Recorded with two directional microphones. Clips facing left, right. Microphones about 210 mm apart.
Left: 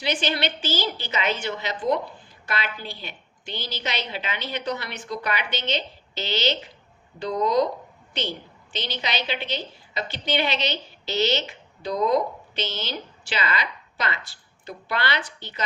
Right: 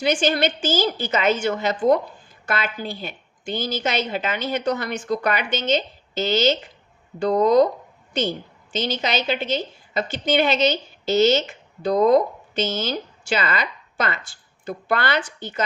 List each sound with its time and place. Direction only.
0.0 s a woman's voice: 45° right (ahead or behind)